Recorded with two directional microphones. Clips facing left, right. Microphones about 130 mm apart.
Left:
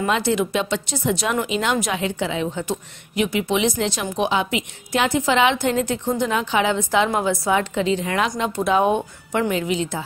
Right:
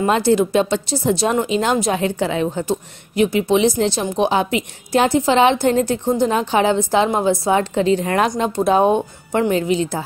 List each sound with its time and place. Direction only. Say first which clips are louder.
0.0 s speech: right 5 dB; 35° right (ahead or behind)